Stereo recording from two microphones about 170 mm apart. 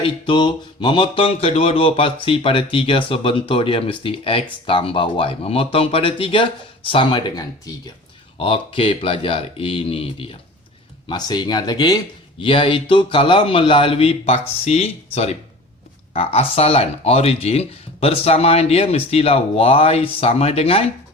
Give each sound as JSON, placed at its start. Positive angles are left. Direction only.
{"t": 0.0, "sound": "mantra", "side_deg": 30}